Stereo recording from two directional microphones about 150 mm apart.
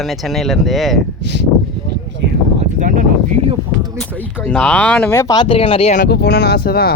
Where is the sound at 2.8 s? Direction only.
60° right (ahead or behind).